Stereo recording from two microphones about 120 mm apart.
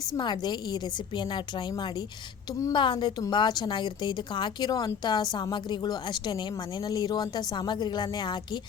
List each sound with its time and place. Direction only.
0.1 s a woman's voice: 40° left (ahead or behind)
2.7 s a woman's voice: 40° left (ahead or behind)